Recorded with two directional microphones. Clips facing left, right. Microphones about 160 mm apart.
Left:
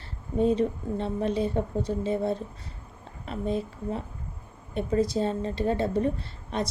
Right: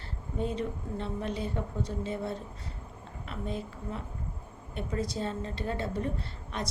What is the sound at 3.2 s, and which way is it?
A woman's voice, 25° left (ahead or behind).